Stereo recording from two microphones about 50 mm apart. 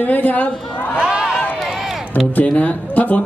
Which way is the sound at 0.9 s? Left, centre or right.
Centre.